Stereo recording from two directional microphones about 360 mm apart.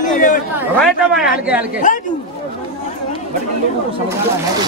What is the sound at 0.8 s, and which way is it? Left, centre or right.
Speech, centre.